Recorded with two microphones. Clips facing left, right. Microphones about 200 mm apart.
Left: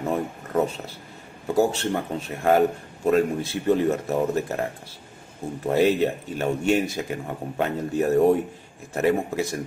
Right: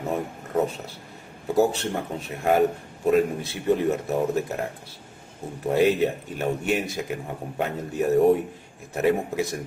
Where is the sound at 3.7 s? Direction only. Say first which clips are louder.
Left 1 dB; centre (ahead or behind).